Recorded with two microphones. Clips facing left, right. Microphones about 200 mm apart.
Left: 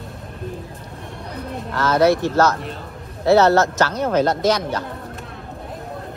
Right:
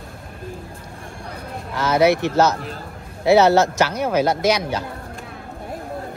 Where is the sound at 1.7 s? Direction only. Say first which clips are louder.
Even; 10° right (ahead or behind).